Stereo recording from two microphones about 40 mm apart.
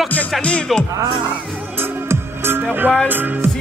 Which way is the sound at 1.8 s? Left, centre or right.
Right.